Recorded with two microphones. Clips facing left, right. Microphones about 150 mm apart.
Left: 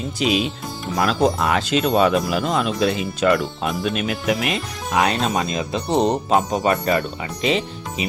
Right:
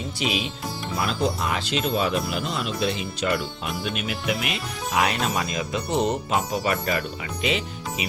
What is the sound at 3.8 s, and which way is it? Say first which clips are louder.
Speech: left 5 dB; 40° left (ahead or behind).